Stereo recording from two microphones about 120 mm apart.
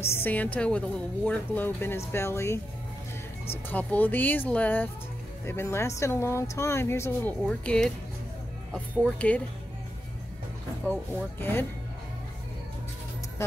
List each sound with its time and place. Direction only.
0.0 s a woman's voice: 20° left (ahead or behind)
3.7 s a woman's voice: 15° left (ahead or behind)
10.9 s a woman's voice: 15° left (ahead or behind)